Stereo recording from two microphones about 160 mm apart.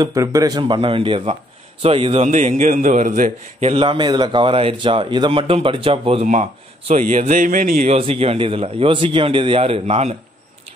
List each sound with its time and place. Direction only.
0.0 s a man's voice: 20° right (ahead or behind)
2.2 s a man's voice: 50° right (ahead or behind); by 6.2 s 35° right (ahead or behind)
6.9 s speech: 50° right (ahead or behind)
7.8 s a man's voice: 40° right (ahead or behind)